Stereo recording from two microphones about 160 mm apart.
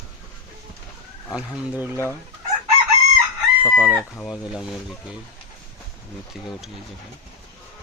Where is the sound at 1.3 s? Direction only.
5° right (ahead or behind).